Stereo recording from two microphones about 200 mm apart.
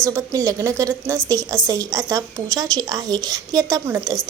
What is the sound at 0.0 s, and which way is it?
A woman's voice, 15° right (ahead or behind).